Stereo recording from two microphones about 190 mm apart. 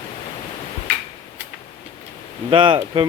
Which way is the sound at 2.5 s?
25° right (ahead or behind).